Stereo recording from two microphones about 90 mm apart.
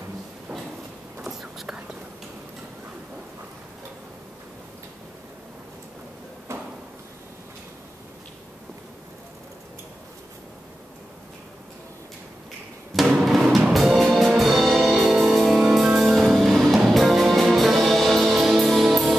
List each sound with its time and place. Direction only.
1.2 s whispering: 5° right (ahead or behind)
6.5 s drawer open or close: 30° right (ahead or behind)
12.9 s drum: 5° right (ahead or behind)
13.7 s music: centre (ahead or behind)